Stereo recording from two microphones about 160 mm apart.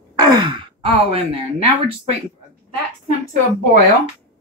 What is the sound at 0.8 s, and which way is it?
Speech, 35° right (ahead or behind).